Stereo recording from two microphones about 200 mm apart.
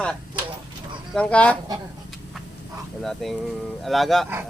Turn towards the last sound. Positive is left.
turn(degrees=0)  # may be behind; listen again after turning